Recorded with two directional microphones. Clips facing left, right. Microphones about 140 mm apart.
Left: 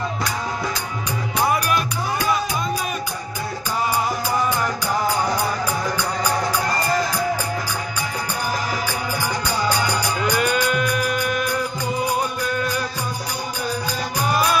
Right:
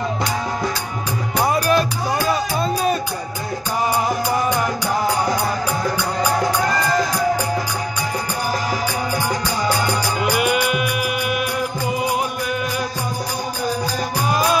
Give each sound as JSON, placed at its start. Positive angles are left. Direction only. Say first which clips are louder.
{"t": 1.5, "sound": "music", "louder": "right 6 dB", "side_deg": -35}
{"t": 10.2, "sound": "music", "louder": "right 2 dB", "side_deg": -15}
{"t": 14.3, "sound": "music", "louder": "right 2 dB", "side_deg": -20}